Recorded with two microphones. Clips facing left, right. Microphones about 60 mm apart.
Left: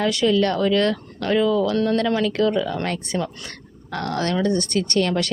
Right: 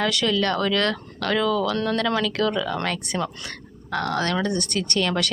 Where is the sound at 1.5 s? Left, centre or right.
Left.